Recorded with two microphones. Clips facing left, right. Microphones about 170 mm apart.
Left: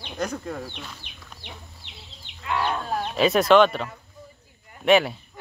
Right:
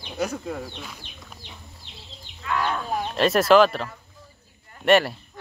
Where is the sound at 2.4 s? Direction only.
20° left (ahead or behind).